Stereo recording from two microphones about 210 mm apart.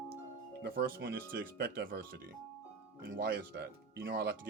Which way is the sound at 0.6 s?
50° right (ahead or behind).